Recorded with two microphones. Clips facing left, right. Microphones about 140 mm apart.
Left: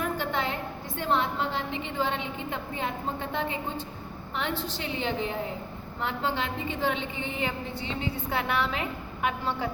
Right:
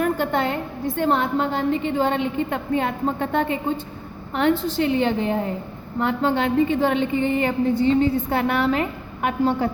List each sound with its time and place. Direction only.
0.0 s a woman's voice: 55° right (ahead or behind)